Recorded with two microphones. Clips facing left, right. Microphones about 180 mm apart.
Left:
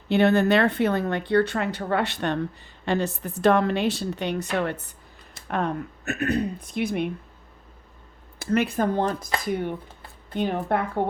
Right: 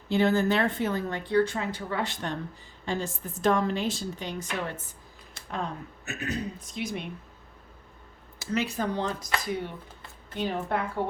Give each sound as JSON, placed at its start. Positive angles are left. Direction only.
{"t": 0.1, "sound": "speech", "side_deg": 70}
{"t": 8.4, "sound": "speech", "side_deg": 55}
{"t": 10.3, "sound": "speech", "side_deg": 55}